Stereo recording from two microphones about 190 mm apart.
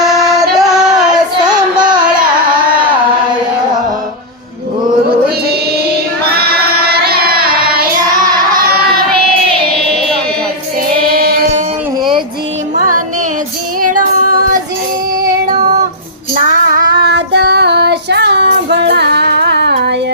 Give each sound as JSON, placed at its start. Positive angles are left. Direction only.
{"t": 0.0, "sound": "music", "side_deg": 0}
{"t": 1.8, "sound": "carnatic music", "side_deg": -20}
{"t": 6.3, "sound": "a sound", "side_deg": -55}
{"t": 11.1, "sound": "music", "side_deg": -55}
{"t": 13.8, "sound": "child singing", "side_deg": -45}
{"t": 16.3, "sound": "child singing", "side_deg": -45}